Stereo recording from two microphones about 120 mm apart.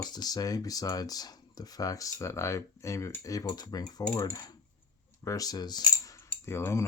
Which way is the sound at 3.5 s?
35° left (ahead or behind).